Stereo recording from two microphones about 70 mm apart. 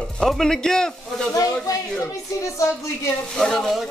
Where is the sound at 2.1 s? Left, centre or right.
Left.